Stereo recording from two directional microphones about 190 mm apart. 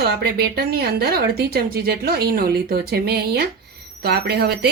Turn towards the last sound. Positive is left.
turn(degrees=-55)  # may be behind; listen again after turning